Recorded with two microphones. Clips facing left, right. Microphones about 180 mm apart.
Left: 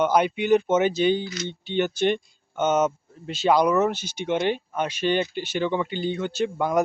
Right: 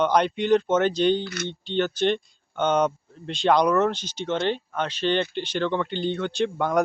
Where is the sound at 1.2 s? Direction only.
60° right (ahead or behind).